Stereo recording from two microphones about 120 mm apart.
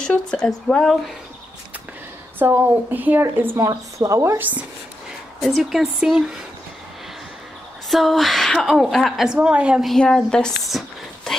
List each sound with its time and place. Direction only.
0.0 s a woman's voice: 5° left (ahead or behind)
2.3 s speech: 15° right (ahead or behind)
5.4 s a woman's voice: centre (ahead or behind)
7.9 s a woman's voice: centre (ahead or behind)